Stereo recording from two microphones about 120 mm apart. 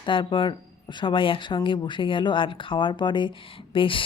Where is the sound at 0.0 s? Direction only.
45° left (ahead or behind).